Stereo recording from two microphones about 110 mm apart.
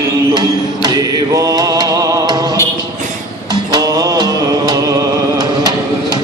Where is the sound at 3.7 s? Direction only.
35° right (ahead or behind).